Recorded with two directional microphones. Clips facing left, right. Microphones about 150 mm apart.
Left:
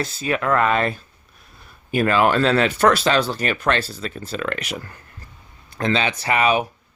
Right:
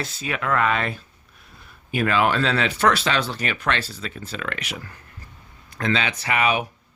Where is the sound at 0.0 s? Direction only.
40° left (ahead or behind).